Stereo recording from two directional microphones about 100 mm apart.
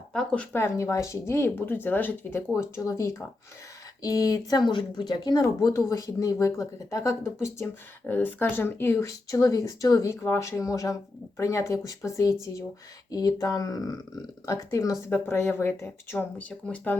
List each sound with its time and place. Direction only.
0.1 s speech: 5° left (ahead or behind)
0.5 s speech: 25° left (ahead or behind)